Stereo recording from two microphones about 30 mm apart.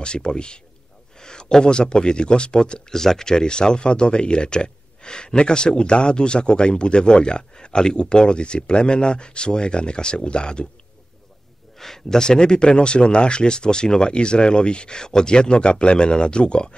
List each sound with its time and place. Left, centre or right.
0.0 s speech: left
2.9 s speech: centre; by 10.7 s left
11.8 s speech: centre; by 16.7 s left